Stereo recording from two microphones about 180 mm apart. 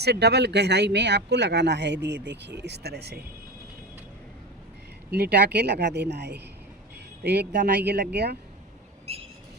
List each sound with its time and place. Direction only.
0.0 s speech: 65° right (ahead or behind)
5.1 s speech: 65° right (ahead or behind)